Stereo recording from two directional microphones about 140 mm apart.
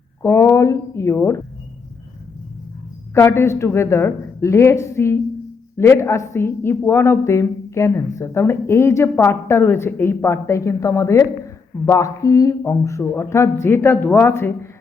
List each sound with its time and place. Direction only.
0.2 s a woman's voice: 20° left (ahead or behind)
3.2 s a woman's voice: 20° left (ahead or behind)